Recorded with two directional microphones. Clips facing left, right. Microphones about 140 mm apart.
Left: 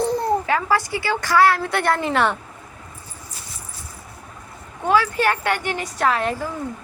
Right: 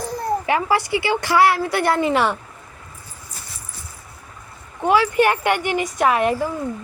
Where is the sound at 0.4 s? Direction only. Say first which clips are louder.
Right 1 dB; 15° right (ahead or behind).